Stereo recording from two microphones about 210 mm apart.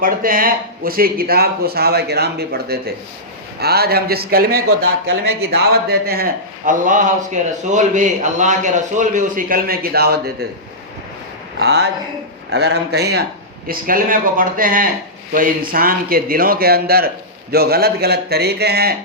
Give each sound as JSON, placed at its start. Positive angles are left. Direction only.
{"t": 0.0, "sound": "a man's voice", "side_deg": -40}
{"t": 11.6, "sound": "a man's voice", "side_deg": -50}